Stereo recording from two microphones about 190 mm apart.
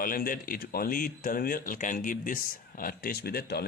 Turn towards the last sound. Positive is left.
turn(degrees=55)  # may be behind; listen again after turning